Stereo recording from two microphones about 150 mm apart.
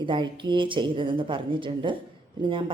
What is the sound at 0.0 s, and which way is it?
Speech, 30° right (ahead or behind).